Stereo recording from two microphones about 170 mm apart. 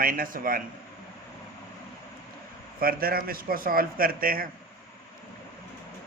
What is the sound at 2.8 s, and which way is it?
Speech, 60° right (ahead or behind).